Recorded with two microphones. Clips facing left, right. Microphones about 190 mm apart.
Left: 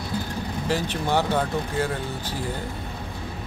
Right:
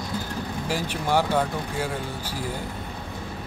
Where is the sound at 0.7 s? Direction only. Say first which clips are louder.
Left 1 dB; 10° right (ahead or behind).